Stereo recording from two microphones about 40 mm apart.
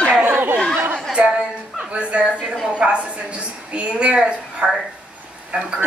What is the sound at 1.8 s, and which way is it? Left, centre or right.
A woman's voice, right.